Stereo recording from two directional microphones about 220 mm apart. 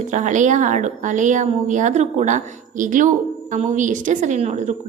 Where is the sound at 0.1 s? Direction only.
35° right (ahead or behind).